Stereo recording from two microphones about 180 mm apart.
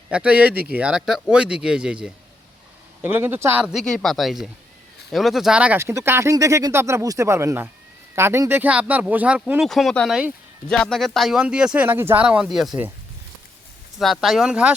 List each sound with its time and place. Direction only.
0.1 s speech: 5° right (ahead or behind)
14.0 s speech: centre (ahead or behind)